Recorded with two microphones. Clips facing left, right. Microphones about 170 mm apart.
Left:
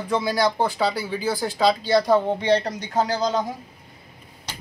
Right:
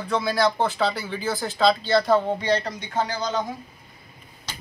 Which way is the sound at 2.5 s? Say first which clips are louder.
Left 3 dB; 35° left (ahead or behind).